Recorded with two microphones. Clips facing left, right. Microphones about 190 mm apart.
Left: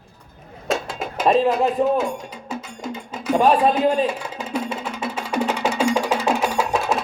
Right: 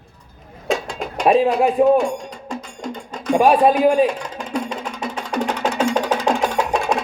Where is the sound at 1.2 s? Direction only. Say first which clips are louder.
Right 2 dB; 10° right (ahead or behind).